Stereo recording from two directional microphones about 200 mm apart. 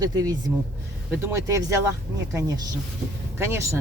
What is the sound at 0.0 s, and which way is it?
Speech, 20° right (ahead or behind).